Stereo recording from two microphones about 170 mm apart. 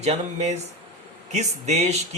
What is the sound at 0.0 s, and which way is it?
Speech, 40° right (ahead or behind).